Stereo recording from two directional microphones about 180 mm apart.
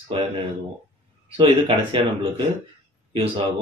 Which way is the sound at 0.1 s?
30° right (ahead or behind).